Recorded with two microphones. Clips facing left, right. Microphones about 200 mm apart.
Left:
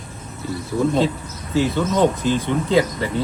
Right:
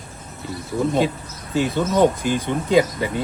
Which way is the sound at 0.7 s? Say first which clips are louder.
Left 1 dB; 15° right (ahead or behind).